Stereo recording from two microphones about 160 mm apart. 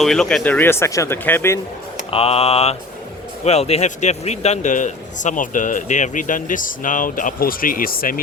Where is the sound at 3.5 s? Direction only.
40° left (ahead or behind).